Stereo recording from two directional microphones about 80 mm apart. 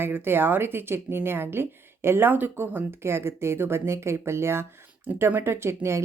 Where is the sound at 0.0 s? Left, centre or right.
Right.